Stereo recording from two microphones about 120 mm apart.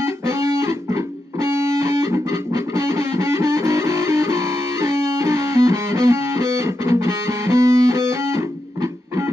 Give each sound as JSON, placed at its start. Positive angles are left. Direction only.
{"t": 0.0, "sound": "music", "side_deg": -25}